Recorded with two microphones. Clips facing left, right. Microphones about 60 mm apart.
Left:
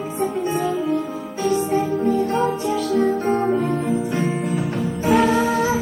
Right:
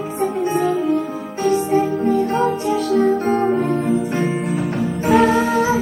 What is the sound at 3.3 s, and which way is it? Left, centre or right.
Music, right.